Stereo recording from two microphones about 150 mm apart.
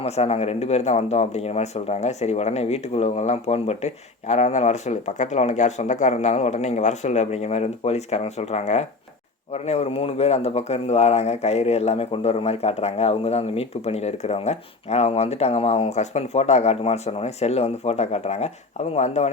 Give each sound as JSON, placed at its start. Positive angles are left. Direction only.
{"t": 0.0, "sound": "speech", "side_deg": 45}